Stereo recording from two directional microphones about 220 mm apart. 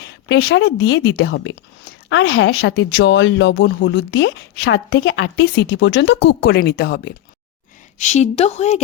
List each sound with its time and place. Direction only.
0.0 s a woman's voice: 50° left (ahead or behind)
7.9 s speech: 30° left (ahead or behind)